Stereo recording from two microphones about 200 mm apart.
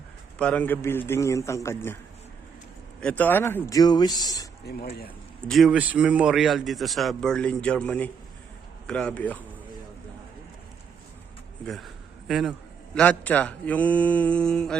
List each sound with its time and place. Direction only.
0.3 s a man's voice: 5° left (ahead or behind)
3.0 s a man's voice: 5° left (ahead or behind)
4.7 s speech: 55° left (ahead or behind)
5.5 s a man's voice: centre (ahead or behind)
11.6 s a man's voice: centre (ahead or behind)